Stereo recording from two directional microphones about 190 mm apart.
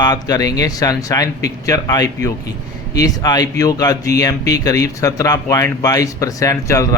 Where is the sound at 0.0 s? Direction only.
20° left (ahead or behind).